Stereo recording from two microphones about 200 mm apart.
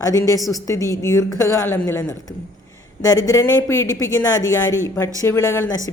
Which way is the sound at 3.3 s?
15° left (ahead or behind).